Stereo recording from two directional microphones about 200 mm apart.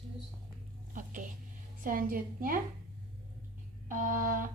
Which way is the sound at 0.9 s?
40° right (ahead or behind).